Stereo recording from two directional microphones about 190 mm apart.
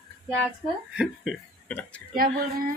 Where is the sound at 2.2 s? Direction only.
50° right (ahead or behind).